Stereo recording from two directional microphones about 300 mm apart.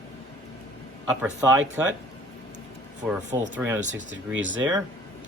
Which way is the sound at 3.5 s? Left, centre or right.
Centre.